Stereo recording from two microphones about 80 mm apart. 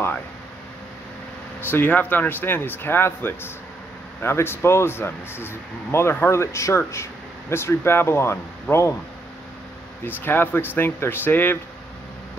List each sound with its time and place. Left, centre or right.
1.6 s speech: left
10.0 s speech: left